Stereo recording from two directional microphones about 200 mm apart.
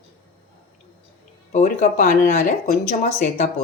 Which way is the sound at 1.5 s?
40° left (ahead or behind).